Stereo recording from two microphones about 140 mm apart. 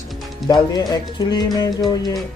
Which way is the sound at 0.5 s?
30° left (ahead or behind).